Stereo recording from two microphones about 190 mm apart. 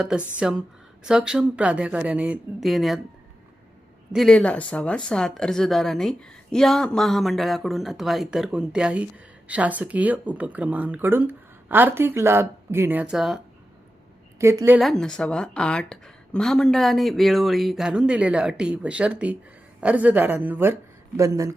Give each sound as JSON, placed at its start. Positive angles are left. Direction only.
{"t": 0.1, "sound": "a woman's voice", "side_deg": -5}
{"t": 4.1, "sound": "a woman's voice", "side_deg": 0}
{"t": 14.3, "sound": "a woman's voice", "side_deg": -15}
{"t": 14.8, "sound": "a woman's voice", "side_deg": 0}